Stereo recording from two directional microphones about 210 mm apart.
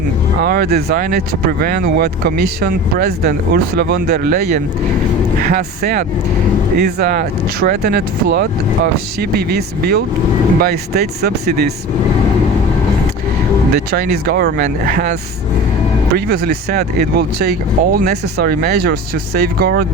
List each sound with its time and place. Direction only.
0.4 s speech: 45° right (ahead or behind)
13.9 s speech: 50° right (ahead or behind)
16.1 s speech: 45° right (ahead or behind)